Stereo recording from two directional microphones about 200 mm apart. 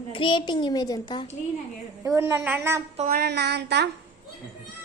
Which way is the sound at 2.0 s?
15° right (ahead or behind).